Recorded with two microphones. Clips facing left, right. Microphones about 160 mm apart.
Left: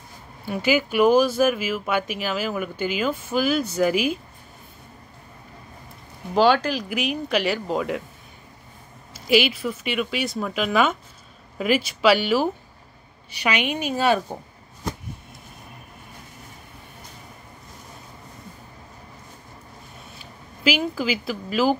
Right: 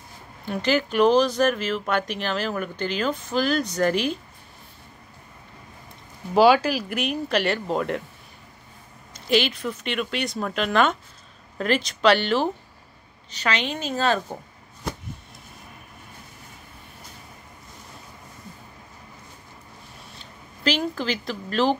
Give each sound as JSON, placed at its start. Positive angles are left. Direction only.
{"t": 0.5, "sound": "speech", "side_deg": 5}
{"t": 6.3, "sound": "speech", "side_deg": -5}
{"t": 9.1, "sound": "speech", "side_deg": 5}
{"t": 20.2, "sound": "speech", "side_deg": 5}